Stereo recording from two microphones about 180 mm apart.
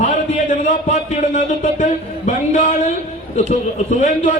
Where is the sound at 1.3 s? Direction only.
45° left (ahead or behind).